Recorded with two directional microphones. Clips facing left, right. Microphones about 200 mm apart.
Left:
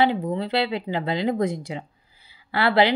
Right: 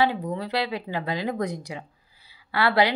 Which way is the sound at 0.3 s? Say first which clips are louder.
Left 3 dB; 25° left (ahead or behind).